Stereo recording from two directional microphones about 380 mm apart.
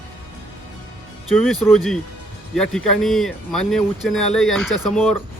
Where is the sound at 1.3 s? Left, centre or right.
Centre.